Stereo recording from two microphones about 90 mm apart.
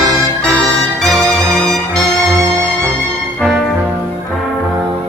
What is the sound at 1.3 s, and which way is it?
Music, 35° right (ahead or behind).